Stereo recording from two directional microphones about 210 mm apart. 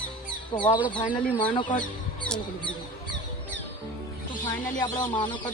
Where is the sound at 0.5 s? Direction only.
20° left (ahead or behind).